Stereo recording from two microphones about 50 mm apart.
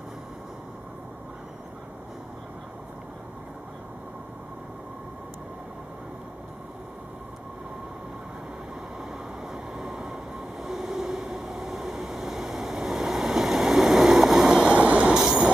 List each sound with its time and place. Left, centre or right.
9.5 s train: centre
14.7 s vehicle: right
15.1 s train: centre